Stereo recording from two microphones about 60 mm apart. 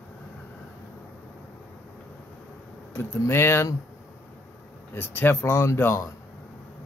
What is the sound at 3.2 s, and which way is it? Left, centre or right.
Speech, left.